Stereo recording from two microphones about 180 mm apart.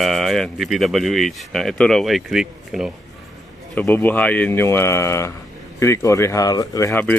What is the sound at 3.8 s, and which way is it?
Speech, 10° left (ahead or behind).